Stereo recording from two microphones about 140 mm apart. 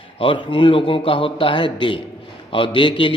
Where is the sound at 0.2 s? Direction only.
35° left (ahead or behind).